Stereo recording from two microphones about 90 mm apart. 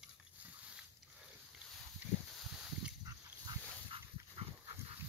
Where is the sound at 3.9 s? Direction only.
90° right.